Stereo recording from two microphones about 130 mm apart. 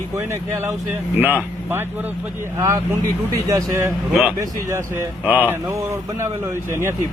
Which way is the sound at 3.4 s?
25° right (ahead or behind).